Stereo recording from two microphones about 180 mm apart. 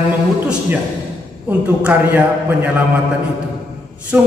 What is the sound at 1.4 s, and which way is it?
A man's voice, 10° right (ahead or behind).